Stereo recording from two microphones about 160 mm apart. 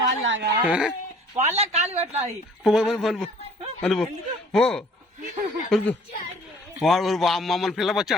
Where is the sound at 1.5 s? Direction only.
40° right (ahead or behind).